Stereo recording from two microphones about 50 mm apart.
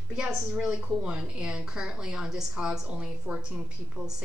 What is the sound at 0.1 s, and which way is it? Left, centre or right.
A woman's voice, centre.